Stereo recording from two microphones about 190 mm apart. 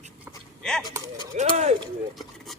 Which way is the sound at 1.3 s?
35° right (ahead or behind).